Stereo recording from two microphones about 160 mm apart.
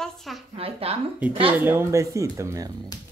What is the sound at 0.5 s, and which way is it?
Speech, 40° right (ahead or behind).